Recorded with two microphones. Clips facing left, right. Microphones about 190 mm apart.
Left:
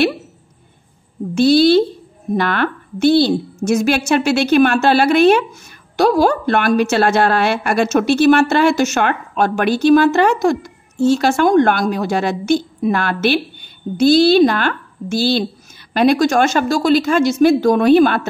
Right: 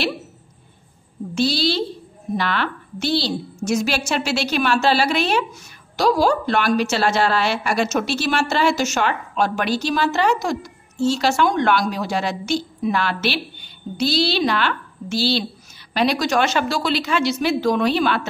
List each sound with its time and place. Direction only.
1.3 s a woman's voice: 55° left (ahead or behind)